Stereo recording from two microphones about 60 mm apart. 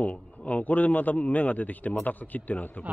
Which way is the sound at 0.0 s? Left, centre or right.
Left.